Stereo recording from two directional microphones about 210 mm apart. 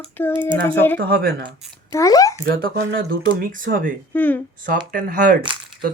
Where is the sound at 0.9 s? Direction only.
45° right (ahead or behind).